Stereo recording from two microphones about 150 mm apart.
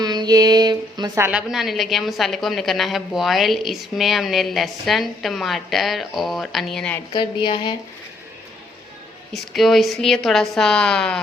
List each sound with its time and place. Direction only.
0.0 s a sound: 25° right (ahead or behind)
1.2 s a woman's voice: 5° right (ahead or behind)
7.1 s a woman's voice: 35° left (ahead or behind)
9.3 s a woman's voice: centre (ahead or behind)